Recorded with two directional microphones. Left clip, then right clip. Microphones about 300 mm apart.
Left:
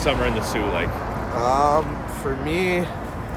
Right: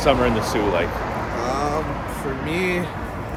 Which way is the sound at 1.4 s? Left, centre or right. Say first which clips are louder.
Left 7 dB; centre.